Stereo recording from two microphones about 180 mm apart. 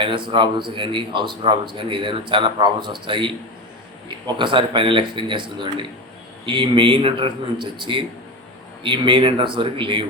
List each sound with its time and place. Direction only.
0.0 s speech: 30° right (ahead or behind)
4.4 s speech: 25° right (ahead or behind)